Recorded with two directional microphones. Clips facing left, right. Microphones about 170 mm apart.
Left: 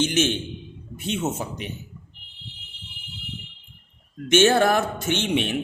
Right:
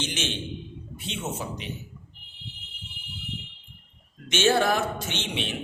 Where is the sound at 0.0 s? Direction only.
50° left (ahead or behind).